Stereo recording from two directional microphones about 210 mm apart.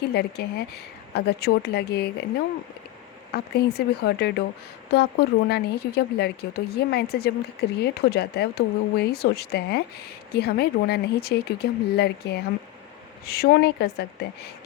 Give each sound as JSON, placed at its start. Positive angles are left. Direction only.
{"t": 0.1, "sound": "a woman's voice", "side_deg": 50}
{"t": 3.3, "sound": "a woman's voice", "side_deg": 50}